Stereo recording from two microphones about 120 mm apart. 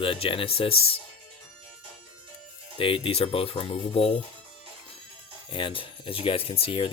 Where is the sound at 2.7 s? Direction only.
50° left (ahead or behind).